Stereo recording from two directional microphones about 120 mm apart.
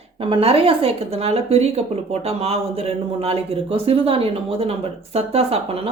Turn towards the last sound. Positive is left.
turn(degrees=-55)  # may be behind; listen again after turning